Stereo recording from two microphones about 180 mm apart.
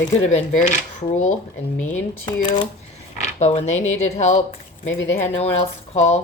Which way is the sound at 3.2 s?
40° left (ahead or behind).